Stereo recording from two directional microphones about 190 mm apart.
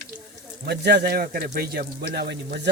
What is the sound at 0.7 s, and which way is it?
A man's voice, 60° right (ahead or behind).